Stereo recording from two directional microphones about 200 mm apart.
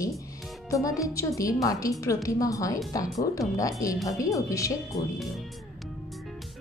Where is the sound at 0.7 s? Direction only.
15° left (ahead or behind).